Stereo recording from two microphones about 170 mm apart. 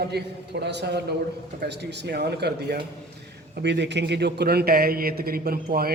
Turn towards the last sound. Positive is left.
turn(degrees=-65)  # may be behind; listen again after turning